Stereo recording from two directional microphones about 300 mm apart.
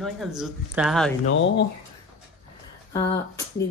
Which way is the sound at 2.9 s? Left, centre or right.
Centre.